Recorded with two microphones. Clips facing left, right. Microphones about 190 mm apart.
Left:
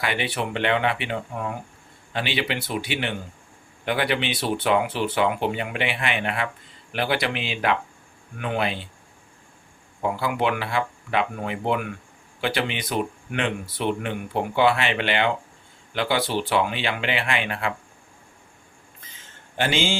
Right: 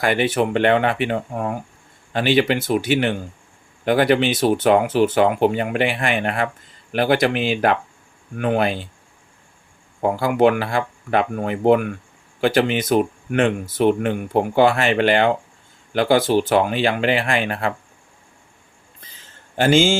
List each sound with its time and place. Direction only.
0.0 s speech: 45° right (ahead or behind)
10.0 s speech: 45° right (ahead or behind)
18.9 s a sound: 35° right (ahead or behind)